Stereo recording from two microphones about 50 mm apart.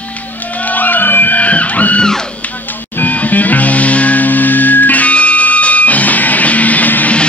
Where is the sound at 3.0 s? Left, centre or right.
Left.